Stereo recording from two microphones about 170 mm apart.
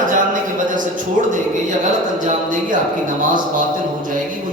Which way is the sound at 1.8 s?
45° right (ahead or behind).